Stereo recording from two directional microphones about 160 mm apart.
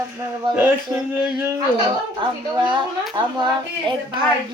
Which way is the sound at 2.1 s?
30° right (ahead or behind).